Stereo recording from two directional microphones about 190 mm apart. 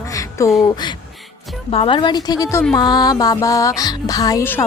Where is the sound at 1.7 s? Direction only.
30° left (ahead or behind); by 4.6 s 15° left (ahead or behind).